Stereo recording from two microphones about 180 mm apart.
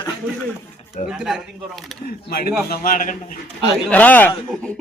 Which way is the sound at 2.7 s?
50° left (ahead or behind).